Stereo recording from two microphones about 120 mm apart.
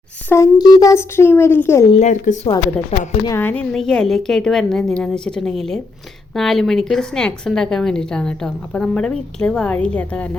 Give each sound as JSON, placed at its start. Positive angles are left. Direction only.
{"t": 0.3, "sound": "a child's voice", "side_deg": 25}
{"t": 2.0, "sound": "a woman's voice", "side_deg": 80}
{"t": 3.3, "sound": "a woman's voice", "side_deg": 15}